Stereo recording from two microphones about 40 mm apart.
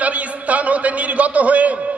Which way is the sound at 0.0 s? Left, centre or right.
Right.